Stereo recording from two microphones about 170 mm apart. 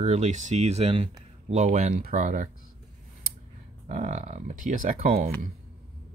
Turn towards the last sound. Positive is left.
turn(degrees=-55)  # may be behind; listen again after turning